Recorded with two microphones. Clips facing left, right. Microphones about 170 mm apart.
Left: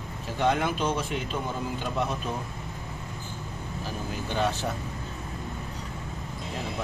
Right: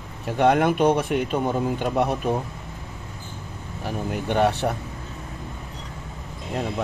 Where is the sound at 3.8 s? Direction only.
65° right (ahead or behind).